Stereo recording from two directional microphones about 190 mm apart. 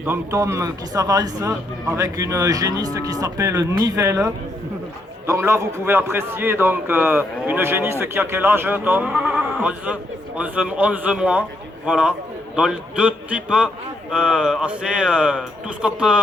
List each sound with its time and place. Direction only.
0.0 s a man's voice: 15° right (ahead or behind)